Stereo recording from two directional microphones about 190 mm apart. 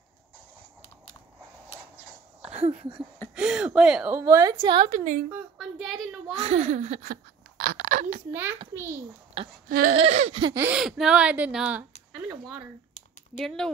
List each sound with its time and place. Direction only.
3.3 s speech: 5° right (ahead or behind)
4.6 s a woman's voice: 30° right (ahead or behind)
5.3 s a woman's voice: centre (ahead or behind)
6.3 s speech: 30° right (ahead or behind)
8.3 s a child's voice: 10° right (ahead or behind)
9.4 s a woman's voice: 30° right (ahead or behind)
9.7 s a sound: 50° right (ahead or behind)
9.9 s a woman's voice: 35° right (ahead or behind)
10.5 s speech: 10° right (ahead or behind)
12.1 s a sound: 5° right (ahead or behind)
13.4 s speech: centre (ahead or behind)